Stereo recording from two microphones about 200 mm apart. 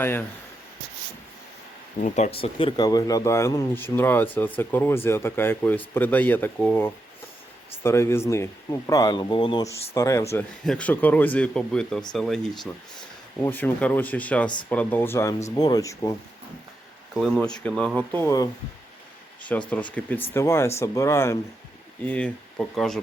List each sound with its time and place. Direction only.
0.0 s speech: 10° left (ahead or behind)
2.0 s speech: 35° left (ahead or behind); by 16.1 s 15° left (ahead or behind)
17.2 s speech: centre (ahead or behind)